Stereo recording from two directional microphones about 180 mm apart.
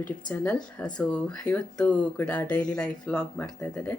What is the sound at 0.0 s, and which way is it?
Speech, 5° left (ahead or behind).